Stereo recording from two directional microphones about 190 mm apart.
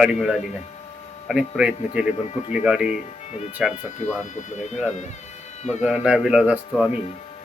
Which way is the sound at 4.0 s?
40° left (ahead or behind).